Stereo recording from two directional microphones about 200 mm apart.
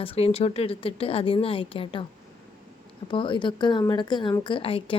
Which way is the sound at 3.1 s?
25° left (ahead or behind).